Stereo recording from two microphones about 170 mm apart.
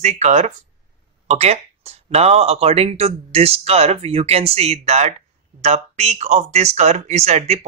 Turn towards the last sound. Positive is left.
turn(degrees=-40)  # may be behind; listen again after turning